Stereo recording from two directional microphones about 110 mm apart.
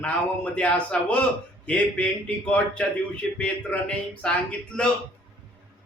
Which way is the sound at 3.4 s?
10° left (ahead or behind).